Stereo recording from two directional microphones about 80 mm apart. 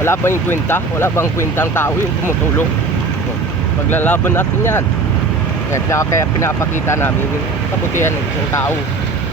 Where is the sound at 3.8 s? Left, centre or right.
Left.